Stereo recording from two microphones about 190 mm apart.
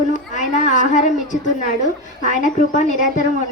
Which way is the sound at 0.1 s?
40° left (ahead or behind).